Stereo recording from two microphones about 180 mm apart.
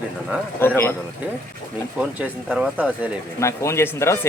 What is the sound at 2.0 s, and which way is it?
Speech, 5° right (ahead or behind).